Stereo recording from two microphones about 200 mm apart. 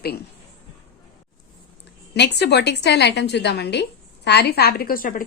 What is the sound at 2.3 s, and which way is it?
A woman's voice, 55° left (ahead or behind).